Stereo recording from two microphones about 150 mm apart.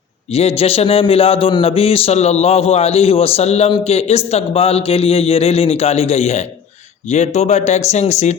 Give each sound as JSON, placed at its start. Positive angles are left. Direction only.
{"t": 0.3, "sound": "a man's voice", "side_deg": 40}